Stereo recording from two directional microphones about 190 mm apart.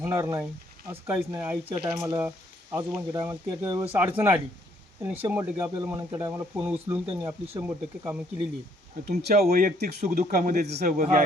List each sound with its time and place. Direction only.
0.0 s speech: 15° right (ahead or behind)
9.2 s speech: 55° right (ahead or behind)